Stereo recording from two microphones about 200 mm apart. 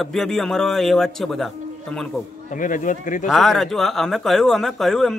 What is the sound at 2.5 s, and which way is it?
Speech, 40° left (ahead or behind).